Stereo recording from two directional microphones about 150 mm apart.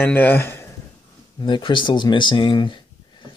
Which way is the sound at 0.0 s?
10° left (ahead or behind).